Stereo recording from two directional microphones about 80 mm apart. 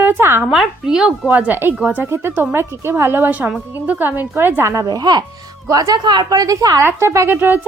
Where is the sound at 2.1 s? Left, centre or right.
Right.